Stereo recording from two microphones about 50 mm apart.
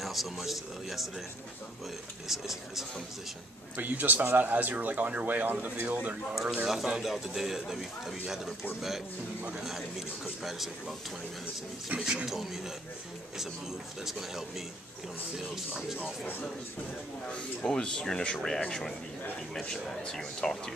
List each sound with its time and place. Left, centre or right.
0.0 s speech: centre
2.2 s speech: centre
3.7 s speech: right
6.3 s speech: centre
9.6 s speech: centre
15.3 s speech: centre
17.6 s speech: centre